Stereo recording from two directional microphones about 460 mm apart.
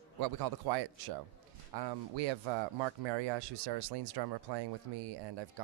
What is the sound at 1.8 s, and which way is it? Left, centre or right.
Speech, right.